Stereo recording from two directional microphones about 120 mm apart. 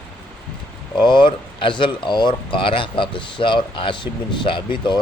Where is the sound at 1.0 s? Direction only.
40° left (ahead or behind).